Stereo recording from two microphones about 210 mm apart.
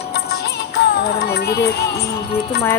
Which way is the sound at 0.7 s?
50° left (ahead or behind).